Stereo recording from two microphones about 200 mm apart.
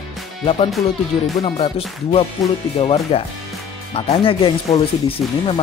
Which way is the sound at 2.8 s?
30° left (ahead or behind).